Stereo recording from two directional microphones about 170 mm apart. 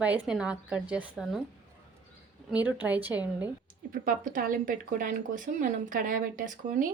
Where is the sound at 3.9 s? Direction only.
55° right (ahead or behind).